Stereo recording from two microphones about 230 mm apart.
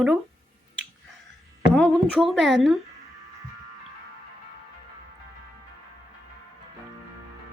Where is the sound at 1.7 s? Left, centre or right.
Centre.